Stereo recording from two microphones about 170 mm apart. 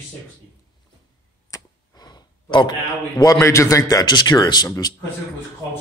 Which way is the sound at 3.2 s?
20° left (ahead or behind).